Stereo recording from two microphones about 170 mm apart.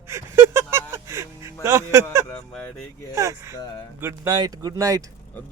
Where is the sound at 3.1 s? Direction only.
15° right (ahead or behind).